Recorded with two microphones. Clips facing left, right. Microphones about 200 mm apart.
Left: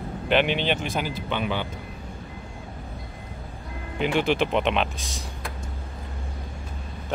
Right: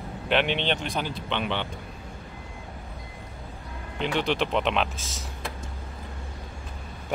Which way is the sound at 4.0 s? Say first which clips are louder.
Left 3 dB; 5° left (ahead or behind).